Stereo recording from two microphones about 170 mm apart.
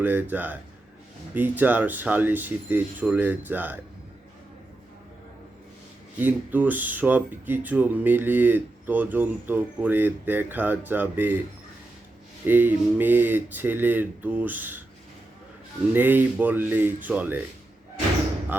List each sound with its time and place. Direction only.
0.0 s speech: 10° right (ahead or behind)
6.1 s speech: 10° right (ahead or behind)
12.5 s speech: 10° right (ahead or behind)
15.9 s speech: 10° right (ahead or behind)